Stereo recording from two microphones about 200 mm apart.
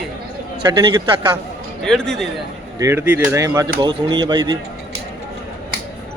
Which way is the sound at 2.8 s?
10° right (ahead or behind).